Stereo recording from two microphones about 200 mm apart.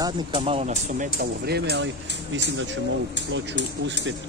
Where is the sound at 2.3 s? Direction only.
65° right (ahead or behind).